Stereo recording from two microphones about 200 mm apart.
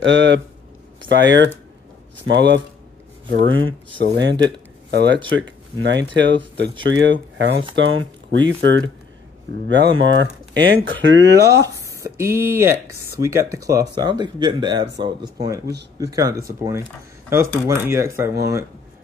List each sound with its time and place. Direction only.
0.0 s speech: 65° right (ahead or behind)
3.4 s speech: 75° right (ahead or behind)
4.0 s speech: 60° right (ahead or behind)
5.3 s speech: 70° right (ahead or behind)
12.0 s speech: 15° right (ahead or behind)